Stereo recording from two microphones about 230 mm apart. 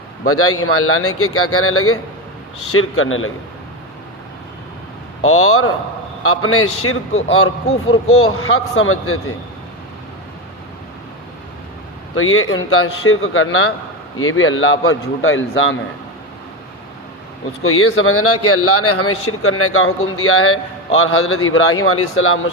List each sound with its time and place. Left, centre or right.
0.3 s a man's voice: left
5.2 s a man's voice: left
12.1 s a man's voice: left
17.6 s a man's voice: left